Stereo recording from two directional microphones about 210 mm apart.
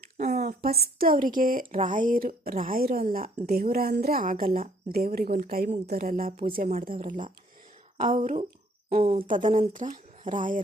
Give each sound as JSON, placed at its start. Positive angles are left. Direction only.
{"t": 0.2, "sound": "a woman's voice", "side_deg": -35}
{"t": 0.8, "sound": "speech", "side_deg": -45}